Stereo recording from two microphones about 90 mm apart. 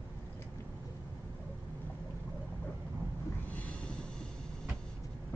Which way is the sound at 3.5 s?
15° left (ahead or behind).